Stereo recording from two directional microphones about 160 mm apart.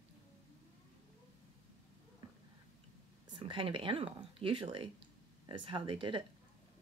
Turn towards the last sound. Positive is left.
turn(degrees=-30)  # may be behind; listen again after turning